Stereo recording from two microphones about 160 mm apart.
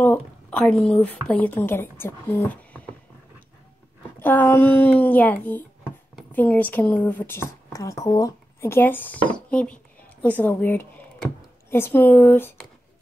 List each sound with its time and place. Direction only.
0.0 s a woman's voice: 10° left (ahead or behind)
4.2 s a woman's voice: 10° left (ahead or behind)